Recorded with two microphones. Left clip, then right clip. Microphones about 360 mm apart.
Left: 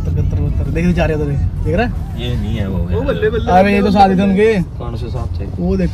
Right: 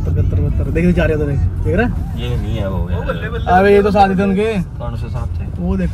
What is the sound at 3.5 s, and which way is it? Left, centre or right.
Speech, right.